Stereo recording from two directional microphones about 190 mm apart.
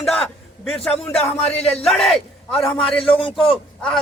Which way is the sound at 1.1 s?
5° left (ahead or behind).